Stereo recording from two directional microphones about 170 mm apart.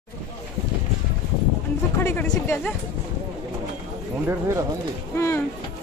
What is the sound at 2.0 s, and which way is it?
Speech, 10° left (ahead or behind).